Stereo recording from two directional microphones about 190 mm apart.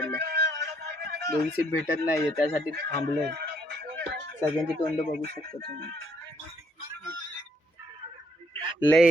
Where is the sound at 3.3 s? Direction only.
65° right (ahead or behind).